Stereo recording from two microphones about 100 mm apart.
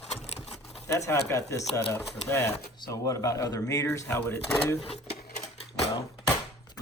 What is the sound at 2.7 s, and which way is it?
Speech, 40° left (ahead or behind).